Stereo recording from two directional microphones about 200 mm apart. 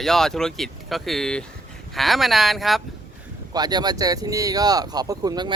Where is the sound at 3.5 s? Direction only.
20° right (ahead or behind).